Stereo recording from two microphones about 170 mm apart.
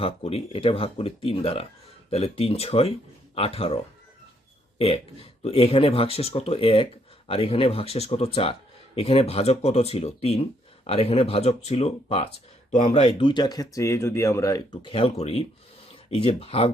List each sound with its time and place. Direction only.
0.0 s speech: 35° left (ahead or behind)
4.8 s speech: 35° left (ahead or behind)